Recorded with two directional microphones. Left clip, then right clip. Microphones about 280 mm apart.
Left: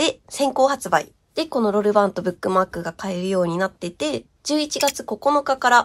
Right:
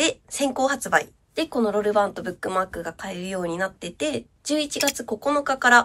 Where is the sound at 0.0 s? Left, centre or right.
Centre.